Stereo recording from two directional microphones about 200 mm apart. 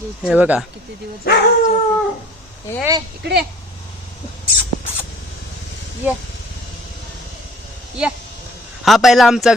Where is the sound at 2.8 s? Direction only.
15° right (ahead or behind).